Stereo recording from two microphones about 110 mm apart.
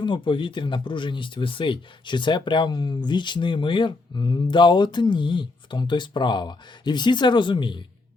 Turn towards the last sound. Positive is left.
turn(degrees=45)  # may be behind; listen again after turning